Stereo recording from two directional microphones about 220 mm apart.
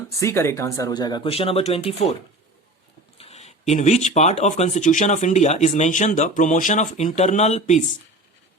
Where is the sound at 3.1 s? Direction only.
30° left (ahead or behind).